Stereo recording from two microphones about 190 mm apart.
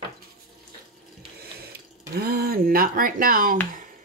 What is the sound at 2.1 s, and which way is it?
Speech, 55° right (ahead or behind).